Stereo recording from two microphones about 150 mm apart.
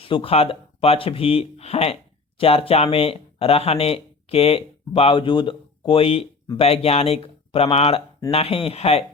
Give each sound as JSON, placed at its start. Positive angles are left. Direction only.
{"t": 0.0, "sound": "speech", "side_deg": 40}